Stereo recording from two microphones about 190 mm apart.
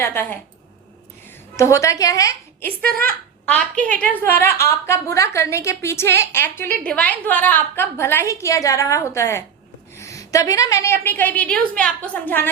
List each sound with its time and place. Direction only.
0.0 s a woman's voice: 10° left (ahead or behind)
1.5 s a woman's voice: 15° left (ahead or behind)
2.8 s speech: 50° right (ahead or behind)
3.5 s a woman's voice: 5° left (ahead or behind)